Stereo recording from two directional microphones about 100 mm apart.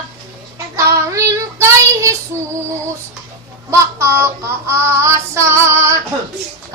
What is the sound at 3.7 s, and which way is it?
Child singing, 25° right (ahead or behind).